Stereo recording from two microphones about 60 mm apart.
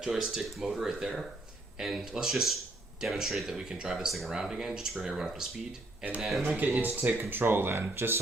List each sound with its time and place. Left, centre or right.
0.0 s speech: centre
6.7 s speech: right